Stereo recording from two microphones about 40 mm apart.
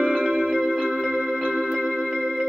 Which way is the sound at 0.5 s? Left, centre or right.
Centre.